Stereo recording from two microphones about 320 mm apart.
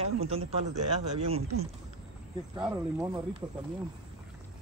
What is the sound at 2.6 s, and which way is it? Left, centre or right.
Speech, centre.